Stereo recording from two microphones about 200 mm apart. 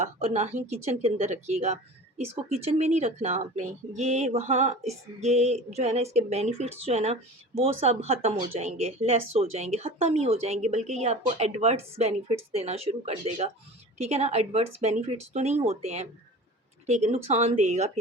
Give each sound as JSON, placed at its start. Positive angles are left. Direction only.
{"t": 0.0, "sound": "speech", "side_deg": -30}